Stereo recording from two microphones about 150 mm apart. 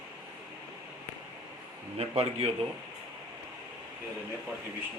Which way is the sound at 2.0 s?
40° right (ahead or behind).